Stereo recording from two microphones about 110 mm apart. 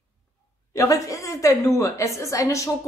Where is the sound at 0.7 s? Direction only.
30° left (ahead or behind).